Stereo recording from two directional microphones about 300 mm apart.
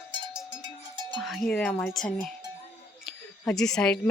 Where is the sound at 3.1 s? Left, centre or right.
Centre.